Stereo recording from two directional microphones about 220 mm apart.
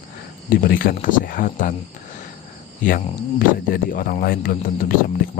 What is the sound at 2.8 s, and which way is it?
Speech, 40° left (ahead or behind).